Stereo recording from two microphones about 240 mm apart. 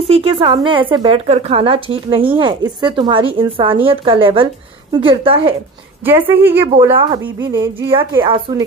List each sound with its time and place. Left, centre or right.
0.1 s a woman's voice: right
6.2 s a woman's voice: centre